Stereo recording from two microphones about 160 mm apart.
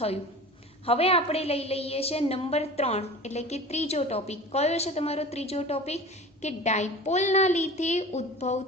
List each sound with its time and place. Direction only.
0.9 s a woman's voice: 40° left (ahead or behind)